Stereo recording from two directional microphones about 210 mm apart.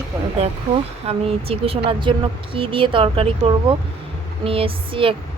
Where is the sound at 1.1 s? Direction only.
25° right (ahead or behind).